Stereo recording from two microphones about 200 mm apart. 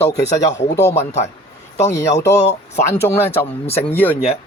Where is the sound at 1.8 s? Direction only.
15° left (ahead or behind).